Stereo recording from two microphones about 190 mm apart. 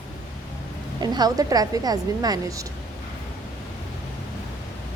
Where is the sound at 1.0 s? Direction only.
20° right (ahead or behind).